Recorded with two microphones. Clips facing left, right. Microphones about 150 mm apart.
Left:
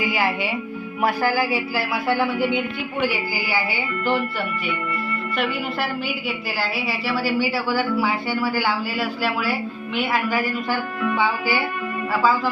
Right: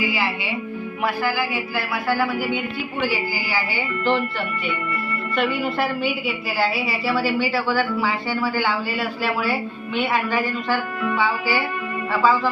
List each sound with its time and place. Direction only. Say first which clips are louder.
0.0 s music: left 1 dB; 50° left (ahead or behind)
1.0 s speech: left 3 dB; 40° left (ahead or behind); by 2.6 s 25° left (ahead or behind)
3.0 s music: left 1 dB; 15° left (ahead or behind)
6.0 s a woman's voice: right 3 dB; centre (ahead or behind)
11.1 s music: even; 15° left (ahead or behind)